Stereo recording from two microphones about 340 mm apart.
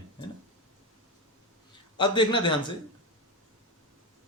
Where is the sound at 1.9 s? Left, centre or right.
Centre.